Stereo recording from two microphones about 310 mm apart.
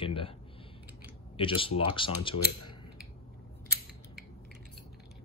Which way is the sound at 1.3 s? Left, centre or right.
Centre.